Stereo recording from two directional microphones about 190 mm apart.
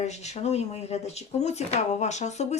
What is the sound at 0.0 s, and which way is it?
Speech, 35° left (ahead or behind).